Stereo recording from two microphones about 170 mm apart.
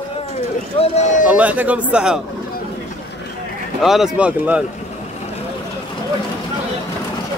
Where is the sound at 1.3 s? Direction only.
10° right (ahead or behind).